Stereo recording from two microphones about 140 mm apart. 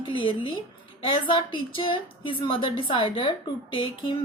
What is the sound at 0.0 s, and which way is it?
A woman's voice, 35° left (ahead or behind).